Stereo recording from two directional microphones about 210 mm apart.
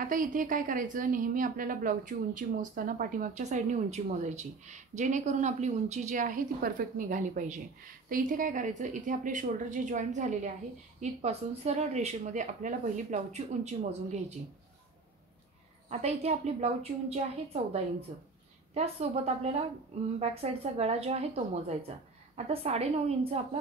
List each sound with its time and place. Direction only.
0.0 s a woman's voice: 40° right (ahead or behind)
15.9 s a woman's voice: 30° right (ahead or behind)